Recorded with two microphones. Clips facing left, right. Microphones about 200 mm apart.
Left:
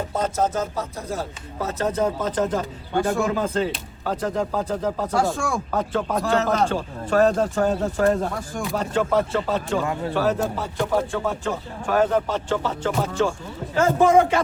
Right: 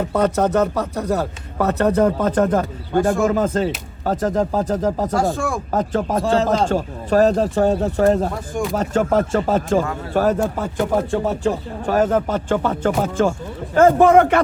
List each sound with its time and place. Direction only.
0.1 s speech: 65° right (ahead or behind); by 5.1 s 40° right (ahead or behind)
5.1 s speech: centre (ahead or behind)
5.7 s speech: 40° right (ahead or behind)
6.1 s speech: 30° right (ahead or behind)
6.7 s speech: 40° right (ahead or behind)
11.2 s speech: 35° right (ahead or behind); by 14.4 s 65° right (ahead or behind)